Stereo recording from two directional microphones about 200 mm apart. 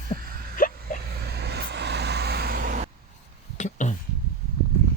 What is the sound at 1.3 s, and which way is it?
Vehicle, 55° right (ahead or behind).